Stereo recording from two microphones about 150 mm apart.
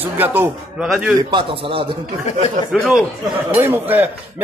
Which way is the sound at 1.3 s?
35° right (ahead or behind).